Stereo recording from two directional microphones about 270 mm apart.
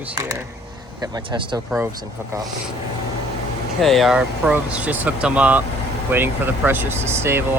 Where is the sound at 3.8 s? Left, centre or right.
Centre.